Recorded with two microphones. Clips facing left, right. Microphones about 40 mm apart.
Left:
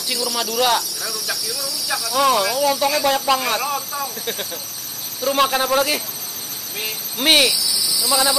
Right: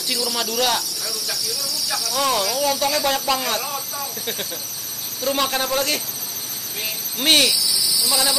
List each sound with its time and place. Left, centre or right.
0.1 s speech: centre
3.6 s a man's voice: centre
5.2 s a man's voice: centre